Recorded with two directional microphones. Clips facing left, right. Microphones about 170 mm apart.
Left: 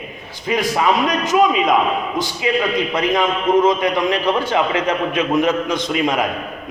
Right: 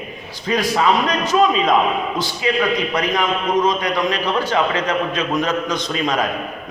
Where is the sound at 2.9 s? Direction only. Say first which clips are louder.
Left 2 dB; 25° left (ahead or behind).